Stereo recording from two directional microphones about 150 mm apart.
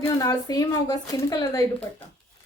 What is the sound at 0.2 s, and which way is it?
A woman's voice, 25° left (ahead or behind).